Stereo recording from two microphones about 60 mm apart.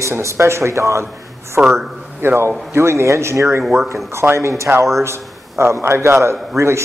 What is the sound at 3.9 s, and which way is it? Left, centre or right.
A man's voice, right.